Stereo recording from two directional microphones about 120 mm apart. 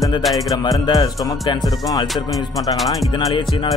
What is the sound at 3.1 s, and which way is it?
Music, 40° left (ahead or behind).